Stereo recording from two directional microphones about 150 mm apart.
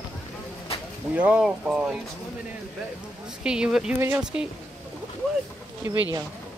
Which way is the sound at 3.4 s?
5° right (ahead or behind).